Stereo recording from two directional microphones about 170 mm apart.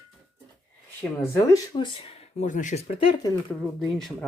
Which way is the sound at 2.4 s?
50° left (ahead or behind).